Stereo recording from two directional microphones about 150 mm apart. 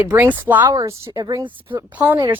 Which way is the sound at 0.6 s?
25° right (ahead or behind).